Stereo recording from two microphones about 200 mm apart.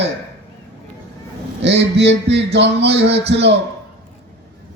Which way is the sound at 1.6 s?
60° right (ahead or behind).